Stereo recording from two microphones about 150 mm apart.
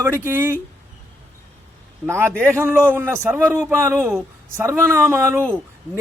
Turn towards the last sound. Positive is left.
turn(degrees=-15)  # may be behind; listen again after turning